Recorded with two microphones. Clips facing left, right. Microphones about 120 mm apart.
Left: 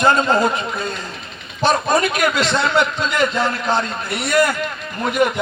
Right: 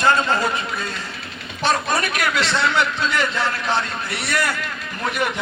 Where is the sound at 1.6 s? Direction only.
15° left (ahead or behind).